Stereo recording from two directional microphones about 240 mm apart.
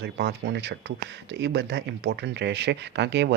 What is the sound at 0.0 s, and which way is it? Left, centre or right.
Speech, right.